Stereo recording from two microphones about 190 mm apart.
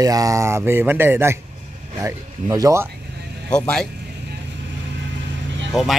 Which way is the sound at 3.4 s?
5° left (ahead or behind).